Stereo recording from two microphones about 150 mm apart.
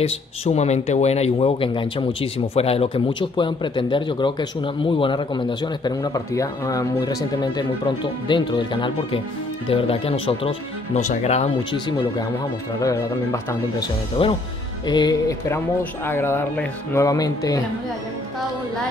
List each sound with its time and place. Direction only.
0.0 s speech: 45° left (ahead or behind)
11.0 s speech: 50° left (ahead or behind)
11.7 s speech: 30° left (ahead or behind)
12.8 s speech: 20° left (ahead or behind)
14.2 s speech: 35° left (ahead or behind)